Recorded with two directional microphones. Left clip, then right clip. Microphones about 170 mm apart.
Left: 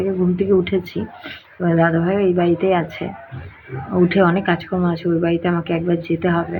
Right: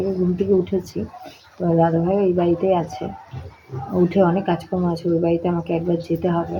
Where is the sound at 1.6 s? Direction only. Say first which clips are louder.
Left 1 dB; 5° right (ahead or behind).